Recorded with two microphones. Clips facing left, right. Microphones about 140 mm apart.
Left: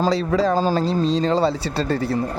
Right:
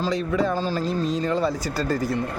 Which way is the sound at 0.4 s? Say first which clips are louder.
Left 5 dB; 90° left.